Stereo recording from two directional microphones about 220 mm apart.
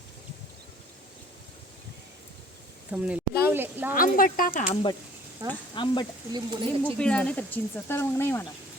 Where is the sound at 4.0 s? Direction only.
40° left (ahead or behind).